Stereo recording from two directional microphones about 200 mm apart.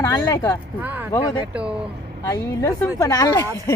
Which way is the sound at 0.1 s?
15° left (ahead or behind).